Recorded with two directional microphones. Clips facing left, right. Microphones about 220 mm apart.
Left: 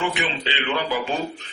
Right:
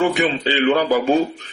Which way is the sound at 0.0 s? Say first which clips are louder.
Right 8 dB; 40° right (ahead or behind).